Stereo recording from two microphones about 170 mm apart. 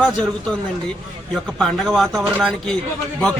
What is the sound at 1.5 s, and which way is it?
Speech, 5° left (ahead or behind).